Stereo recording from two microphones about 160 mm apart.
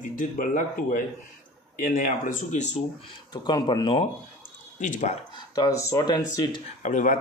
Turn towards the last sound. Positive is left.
turn(degrees=50)  # may be behind; listen again after turning